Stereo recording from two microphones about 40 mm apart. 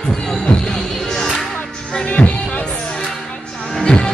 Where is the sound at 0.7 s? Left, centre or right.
Centre.